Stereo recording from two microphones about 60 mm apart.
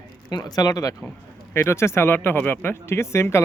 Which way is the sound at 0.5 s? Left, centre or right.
Left.